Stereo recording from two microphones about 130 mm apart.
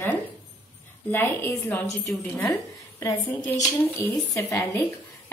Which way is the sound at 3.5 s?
20° left (ahead or behind).